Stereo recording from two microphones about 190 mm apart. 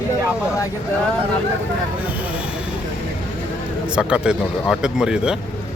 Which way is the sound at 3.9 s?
5° right (ahead or behind).